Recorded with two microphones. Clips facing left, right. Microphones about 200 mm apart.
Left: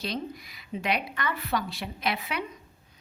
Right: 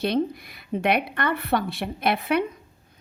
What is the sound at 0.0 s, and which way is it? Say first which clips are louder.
Speech: right 10 dB; 60° right (ahead or behind).